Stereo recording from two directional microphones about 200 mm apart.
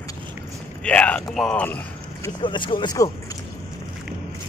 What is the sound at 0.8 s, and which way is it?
Speech, 5° left (ahead or behind).